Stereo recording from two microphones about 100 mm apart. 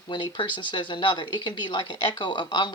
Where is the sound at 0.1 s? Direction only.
55° left (ahead or behind).